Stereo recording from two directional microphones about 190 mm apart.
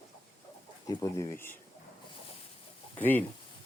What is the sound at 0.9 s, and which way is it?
Speech, 20° left (ahead or behind).